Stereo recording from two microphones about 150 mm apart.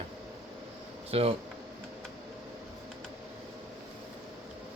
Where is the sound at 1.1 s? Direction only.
40° right (ahead or behind).